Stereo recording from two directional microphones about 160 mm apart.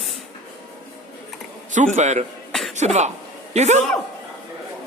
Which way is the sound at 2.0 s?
50° right (ahead or behind).